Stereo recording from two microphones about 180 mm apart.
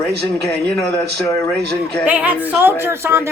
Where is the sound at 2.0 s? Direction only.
10° right (ahead or behind).